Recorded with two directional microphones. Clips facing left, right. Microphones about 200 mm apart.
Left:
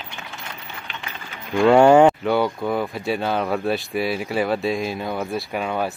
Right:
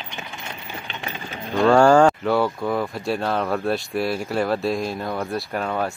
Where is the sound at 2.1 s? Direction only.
Centre (ahead or behind).